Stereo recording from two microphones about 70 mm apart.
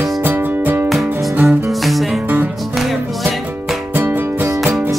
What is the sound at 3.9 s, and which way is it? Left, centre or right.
Music, right.